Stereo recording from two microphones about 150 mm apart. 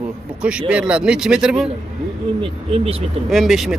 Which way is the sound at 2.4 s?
40° right (ahead or behind).